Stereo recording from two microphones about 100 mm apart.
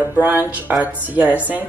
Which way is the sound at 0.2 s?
15° right (ahead or behind).